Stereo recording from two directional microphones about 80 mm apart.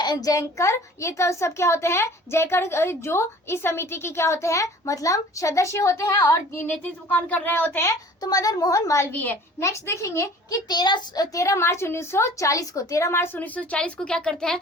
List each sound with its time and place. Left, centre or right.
0.0 s a child's voice: left
6.6 s speech: left
8.2 s a woman's voice: left
9.2 s speech: left
9.6 s a child's voice: left
10.7 s a child's voice: left
11.3 s a child's voice: left; by 14.6 s centre